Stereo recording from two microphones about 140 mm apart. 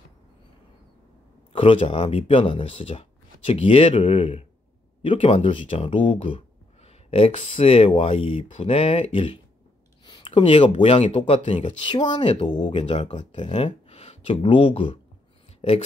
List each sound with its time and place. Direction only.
1.5 s a sound: 40° left (ahead or behind)
1.9 s speech: 40° left (ahead or behind)
13.5 s speech: 50° left (ahead or behind)